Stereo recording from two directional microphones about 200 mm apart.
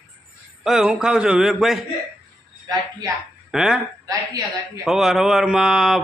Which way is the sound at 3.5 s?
5° right (ahead or behind).